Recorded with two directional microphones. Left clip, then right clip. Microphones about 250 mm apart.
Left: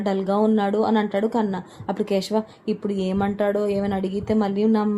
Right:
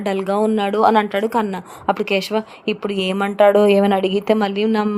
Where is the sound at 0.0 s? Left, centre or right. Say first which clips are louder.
Right 3 dB; right.